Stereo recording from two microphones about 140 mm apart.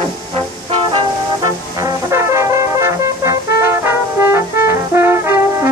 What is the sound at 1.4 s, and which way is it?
Brass instrument, 25° right (ahead or behind).